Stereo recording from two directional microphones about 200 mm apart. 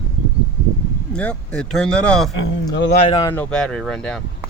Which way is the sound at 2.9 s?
30° left (ahead or behind).